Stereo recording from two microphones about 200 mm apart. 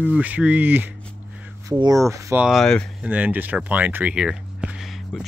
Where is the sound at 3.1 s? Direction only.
10° right (ahead or behind).